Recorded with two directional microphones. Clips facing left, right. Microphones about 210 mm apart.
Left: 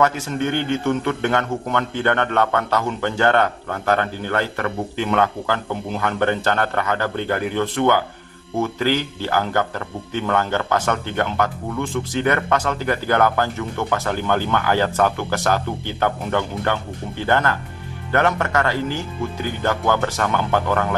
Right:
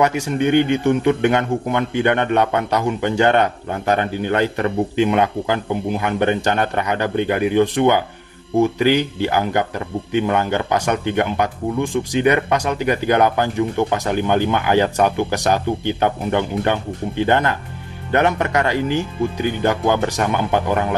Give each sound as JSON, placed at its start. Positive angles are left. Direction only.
{"t": 0.0, "sound": "speech", "side_deg": -15}